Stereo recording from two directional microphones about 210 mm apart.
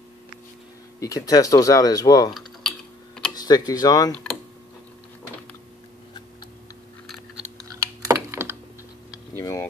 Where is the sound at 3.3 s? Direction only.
20° left (ahead or behind).